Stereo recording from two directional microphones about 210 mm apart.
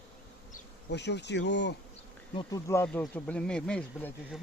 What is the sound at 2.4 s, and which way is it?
Speech, 15° left (ahead or behind).